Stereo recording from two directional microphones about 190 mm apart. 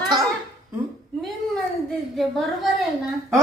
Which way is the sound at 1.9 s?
Centre (ahead or behind).